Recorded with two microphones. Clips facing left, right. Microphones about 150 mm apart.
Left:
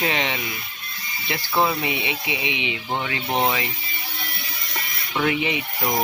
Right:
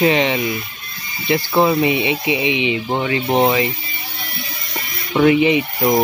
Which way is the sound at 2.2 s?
80° right.